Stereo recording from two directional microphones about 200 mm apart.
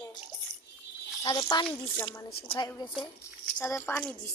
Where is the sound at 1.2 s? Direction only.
20° left (ahead or behind).